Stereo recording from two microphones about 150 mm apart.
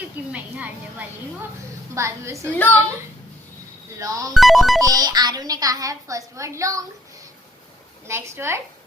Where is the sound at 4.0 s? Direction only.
25° right (ahead or behind).